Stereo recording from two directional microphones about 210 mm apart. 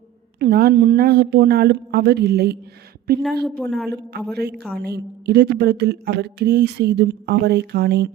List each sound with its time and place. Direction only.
0.3 s speech: 50° right (ahead or behind)
3.4 s speech: 5° left (ahead or behind)
4.3 s speech: 50° right (ahead or behind)